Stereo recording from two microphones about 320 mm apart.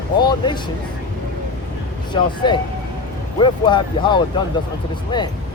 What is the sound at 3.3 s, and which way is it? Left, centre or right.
Speech, centre.